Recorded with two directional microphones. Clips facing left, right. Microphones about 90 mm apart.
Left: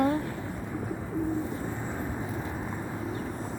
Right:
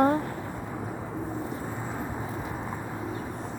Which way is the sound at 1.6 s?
5° right (ahead or behind).